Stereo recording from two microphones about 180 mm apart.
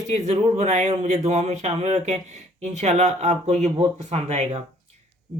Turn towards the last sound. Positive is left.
turn(degrees=-35)  # may be behind; listen again after turning